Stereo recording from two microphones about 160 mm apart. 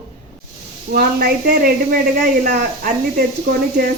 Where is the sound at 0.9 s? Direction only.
65° right (ahead or behind).